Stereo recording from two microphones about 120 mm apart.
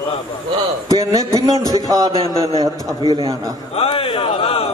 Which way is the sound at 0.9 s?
30° right (ahead or behind).